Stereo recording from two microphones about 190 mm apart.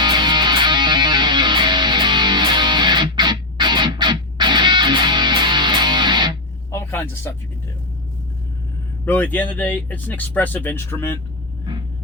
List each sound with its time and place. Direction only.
0.0 s music: 25° right (ahead or behind)
6.7 s a sound: 10° left (ahead or behind)
9.0 s speech: 10° left (ahead or behind)